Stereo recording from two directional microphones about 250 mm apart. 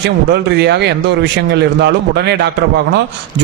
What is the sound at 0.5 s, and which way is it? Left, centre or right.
Speech, right.